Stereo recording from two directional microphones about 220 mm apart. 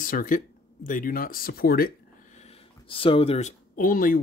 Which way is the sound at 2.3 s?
30° left (ahead or behind).